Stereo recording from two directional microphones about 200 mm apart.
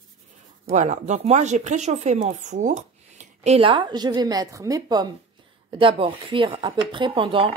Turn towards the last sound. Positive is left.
turn(degrees=-25)  # may be behind; listen again after turning